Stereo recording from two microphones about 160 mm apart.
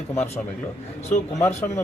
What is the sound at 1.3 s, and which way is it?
Speech, 15° left (ahead or behind).